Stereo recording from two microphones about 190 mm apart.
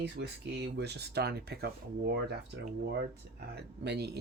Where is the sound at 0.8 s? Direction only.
60° right (ahead or behind).